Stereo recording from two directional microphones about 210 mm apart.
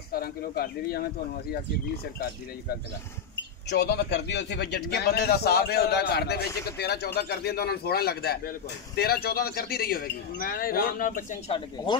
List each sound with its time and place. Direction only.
0.1 s a man's voice: 45° left (ahead or behind)
3.7 s a man's voice: 50° left (ahead or behind)
11.5 s speech: 20° left (ahead or behind)